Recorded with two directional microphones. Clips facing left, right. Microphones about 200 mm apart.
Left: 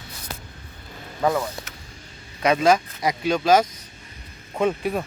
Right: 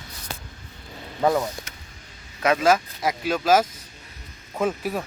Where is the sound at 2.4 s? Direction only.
5° right (ahead or behind).